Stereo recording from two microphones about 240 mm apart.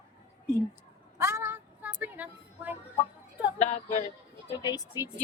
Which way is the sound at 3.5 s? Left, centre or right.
Left.